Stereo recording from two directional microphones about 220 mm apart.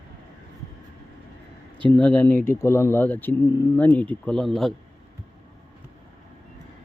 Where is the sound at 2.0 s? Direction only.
5° left (ahead or behind).